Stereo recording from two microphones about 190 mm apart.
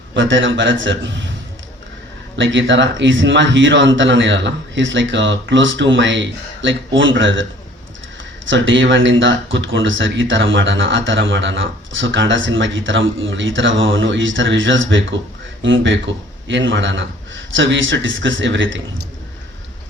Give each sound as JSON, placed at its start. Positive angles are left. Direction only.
{"t": 0.1, "sound": "speech", "side_deg": -75}
{"t": 2.3, "sound": "speech", "side_deg": -70}
{"t": 8.4, "sound": "speech", "side_deg": -75}